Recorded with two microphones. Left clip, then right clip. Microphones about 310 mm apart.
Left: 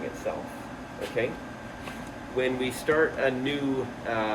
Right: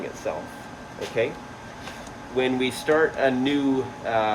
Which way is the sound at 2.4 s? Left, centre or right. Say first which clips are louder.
Right 4 dB; right.